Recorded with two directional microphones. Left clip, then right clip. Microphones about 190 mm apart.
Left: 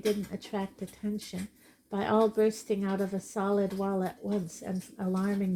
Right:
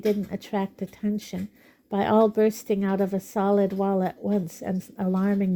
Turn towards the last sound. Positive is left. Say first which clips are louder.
# right 6 dB
turn(degrees=-45)  # may be behind; listen again after turning